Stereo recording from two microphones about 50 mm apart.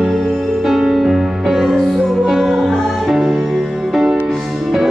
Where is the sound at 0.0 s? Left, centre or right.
Centre.